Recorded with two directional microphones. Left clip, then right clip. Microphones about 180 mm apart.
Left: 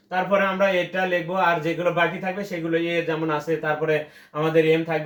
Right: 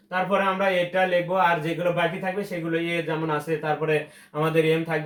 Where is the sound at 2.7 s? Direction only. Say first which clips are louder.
Left 4 dB; 15° right (ahead or behind).